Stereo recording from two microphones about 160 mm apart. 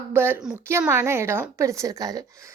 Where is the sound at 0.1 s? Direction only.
15° right (ahead or behind).